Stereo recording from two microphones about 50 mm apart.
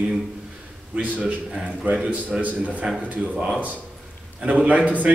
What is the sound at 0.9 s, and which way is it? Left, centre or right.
Speech, right.